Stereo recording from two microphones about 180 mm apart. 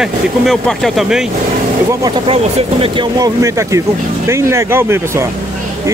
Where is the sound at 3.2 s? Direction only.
15° right (ahead or behind).